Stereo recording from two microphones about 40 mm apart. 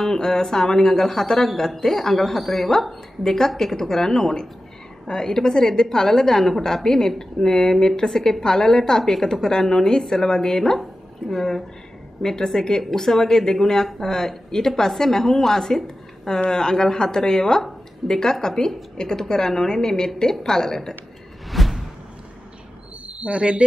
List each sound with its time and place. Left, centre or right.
0.0 s a woman's voice: centre
21.5 s whoosh: centre
23.0 s speech: right